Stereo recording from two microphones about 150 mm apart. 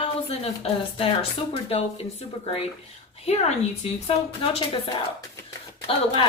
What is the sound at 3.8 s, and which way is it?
Speech, 45° left (ahead or behind).